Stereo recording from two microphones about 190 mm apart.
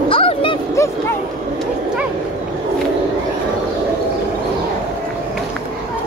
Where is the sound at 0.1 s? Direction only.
30° left (ahead or behind).